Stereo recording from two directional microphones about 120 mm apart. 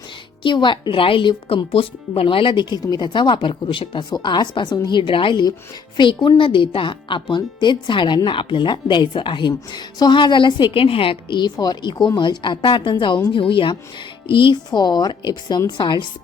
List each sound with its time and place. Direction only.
0.4 s speech: 40° left (ahead or behind)